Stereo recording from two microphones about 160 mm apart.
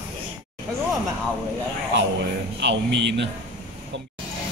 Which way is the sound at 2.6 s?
90° right.